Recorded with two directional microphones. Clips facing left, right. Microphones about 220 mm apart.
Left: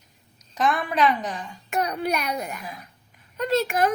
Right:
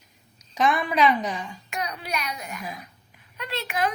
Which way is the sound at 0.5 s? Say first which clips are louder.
Right 1 dB; centre (ahead or behind).